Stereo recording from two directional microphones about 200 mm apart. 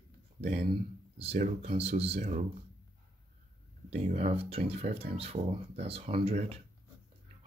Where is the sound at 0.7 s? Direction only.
30° right (ahead or behind).